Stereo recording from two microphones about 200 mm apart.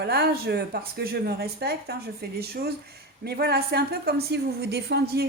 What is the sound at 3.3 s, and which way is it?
Speech, 50° right (ahead or behind).